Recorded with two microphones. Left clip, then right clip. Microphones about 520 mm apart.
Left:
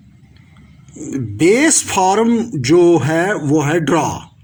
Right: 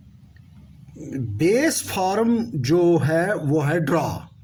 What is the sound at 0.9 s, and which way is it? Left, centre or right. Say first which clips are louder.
Speech: left 8 dB; right.